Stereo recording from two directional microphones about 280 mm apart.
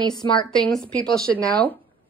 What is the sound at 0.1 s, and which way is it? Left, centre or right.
Speech, centre.